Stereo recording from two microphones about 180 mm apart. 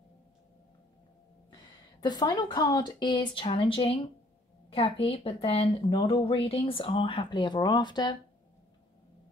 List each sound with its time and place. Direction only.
2.0 s speech: 20° left (ahead or behind)